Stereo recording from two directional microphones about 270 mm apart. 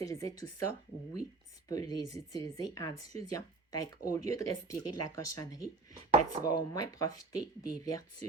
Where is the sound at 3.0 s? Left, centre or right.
Left.